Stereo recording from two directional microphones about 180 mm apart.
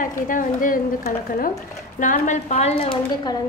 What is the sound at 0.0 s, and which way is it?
A woman's voice, 50° left (ahead or behind).